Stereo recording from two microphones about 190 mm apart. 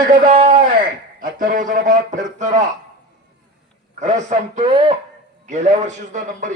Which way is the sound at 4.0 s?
40° right (ahead or behind).